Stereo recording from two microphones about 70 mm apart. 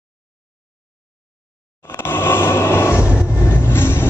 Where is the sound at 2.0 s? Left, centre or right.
Left.